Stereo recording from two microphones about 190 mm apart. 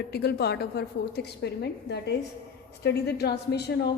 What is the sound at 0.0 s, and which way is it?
A woman's voice, 55° left (ahead or behind).